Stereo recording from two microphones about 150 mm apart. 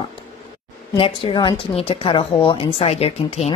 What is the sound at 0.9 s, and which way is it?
A woman's voice, 35° left (ahead or behind).